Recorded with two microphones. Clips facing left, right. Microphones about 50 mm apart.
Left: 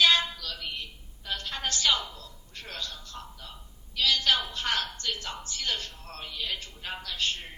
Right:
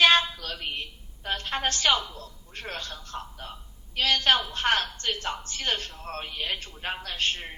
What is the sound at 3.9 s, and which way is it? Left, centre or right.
A woman's voice, right.